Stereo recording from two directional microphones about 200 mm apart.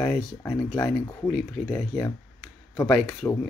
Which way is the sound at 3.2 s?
15° left (ahead or behind).